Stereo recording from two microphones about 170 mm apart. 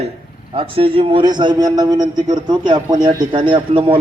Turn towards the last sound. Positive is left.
turn(degrees=-30)  # may be behind; listen again after turning